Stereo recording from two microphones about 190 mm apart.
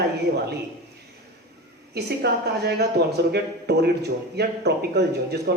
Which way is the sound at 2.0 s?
60° right (ahead or behind).